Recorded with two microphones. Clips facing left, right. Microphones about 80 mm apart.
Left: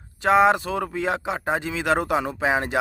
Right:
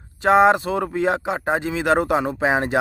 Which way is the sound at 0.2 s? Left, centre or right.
Right.